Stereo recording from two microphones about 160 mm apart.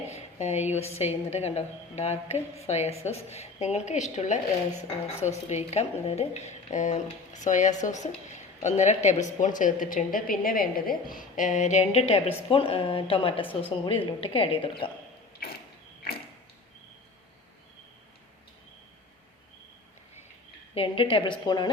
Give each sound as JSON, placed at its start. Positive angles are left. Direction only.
{"t": 0.1, "sound": "a sound", "side_deg": 45}
{"t": 0.9, "sound": "a woman's voice", "side_deg": 40}
{"t": 20.7, "sound": "a woman's voice", "side_deg": 35}